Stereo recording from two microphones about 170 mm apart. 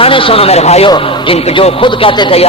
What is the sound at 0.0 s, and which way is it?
A man's voice, 30° left (ahead or behind).